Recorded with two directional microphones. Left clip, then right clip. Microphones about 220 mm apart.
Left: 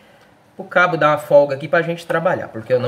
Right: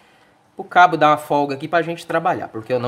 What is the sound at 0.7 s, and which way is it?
Speech, 45° right (ahead or behind).